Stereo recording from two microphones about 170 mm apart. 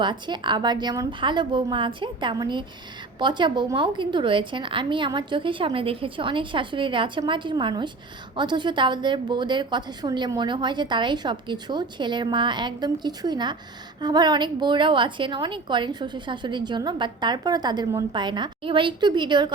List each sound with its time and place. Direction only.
0.0 s a woman's voice: 25° right (ahead or behind)